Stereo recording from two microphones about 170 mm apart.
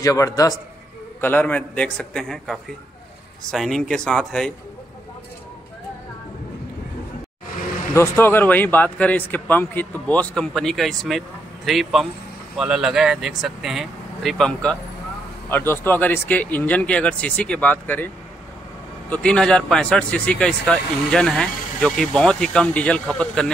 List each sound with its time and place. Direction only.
0.0 s a man's voice: 20° left (ahead or behind)
1.2 s speech: 10° left (ahead or behind)
7.9 s a man's voice: 15° left (ahead or behind)